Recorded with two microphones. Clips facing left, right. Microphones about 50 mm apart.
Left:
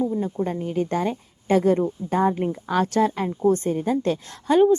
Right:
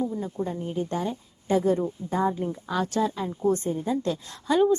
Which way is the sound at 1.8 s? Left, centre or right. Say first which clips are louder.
Left 4 dB; left.